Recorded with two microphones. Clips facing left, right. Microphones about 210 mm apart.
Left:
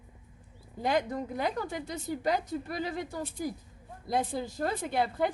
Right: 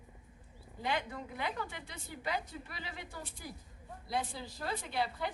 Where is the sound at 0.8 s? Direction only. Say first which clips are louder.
Left 8 dB; 40° left (ahead or behind).